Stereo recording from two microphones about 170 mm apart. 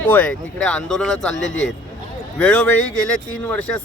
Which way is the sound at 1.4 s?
90° left.